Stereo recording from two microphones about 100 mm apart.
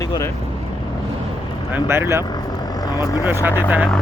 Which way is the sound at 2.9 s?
35° left (ahead or behind).